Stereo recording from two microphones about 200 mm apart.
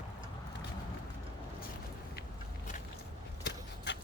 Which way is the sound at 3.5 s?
60° left (ahead or behind).